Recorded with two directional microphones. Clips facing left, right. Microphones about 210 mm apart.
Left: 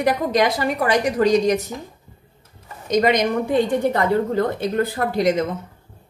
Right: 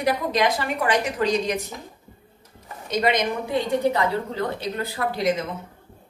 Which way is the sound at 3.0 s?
50° left (ahead or behind).